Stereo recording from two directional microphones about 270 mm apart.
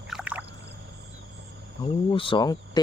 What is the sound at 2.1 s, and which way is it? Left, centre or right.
Speech, centre.